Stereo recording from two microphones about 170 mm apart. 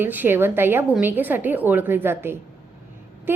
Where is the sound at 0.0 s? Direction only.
10° right (ahead or behind).